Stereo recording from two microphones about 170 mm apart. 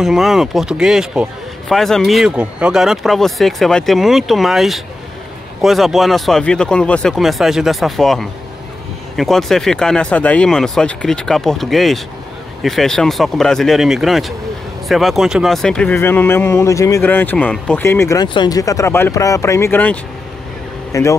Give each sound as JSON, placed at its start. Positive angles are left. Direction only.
{"t": 0.0, "sound": "a man's voice", "side_deg": 0}